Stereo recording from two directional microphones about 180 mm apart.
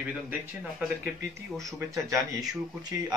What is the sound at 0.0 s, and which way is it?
Speech, 10° right (ahead or behind).